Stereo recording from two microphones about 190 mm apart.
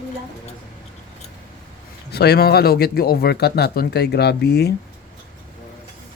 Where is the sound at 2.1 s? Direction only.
60° left (ahead or behind).